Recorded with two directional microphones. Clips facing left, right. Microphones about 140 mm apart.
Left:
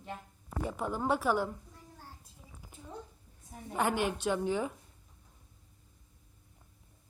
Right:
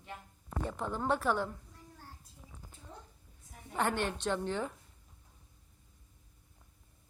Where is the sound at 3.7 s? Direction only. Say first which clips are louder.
Left 2 dB; 10° left (ahead or behind).